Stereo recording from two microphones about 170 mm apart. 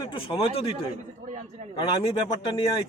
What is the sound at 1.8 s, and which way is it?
Speech, 30° left (ahead or behind).